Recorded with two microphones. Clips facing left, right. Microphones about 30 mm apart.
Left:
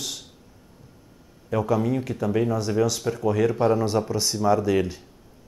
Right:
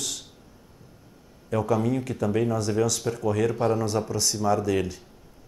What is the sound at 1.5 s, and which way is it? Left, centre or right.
Speech, centre.